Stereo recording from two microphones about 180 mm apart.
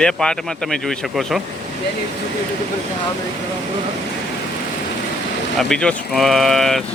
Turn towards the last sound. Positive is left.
turn(degrees=0)  # may be behind; listen again after turning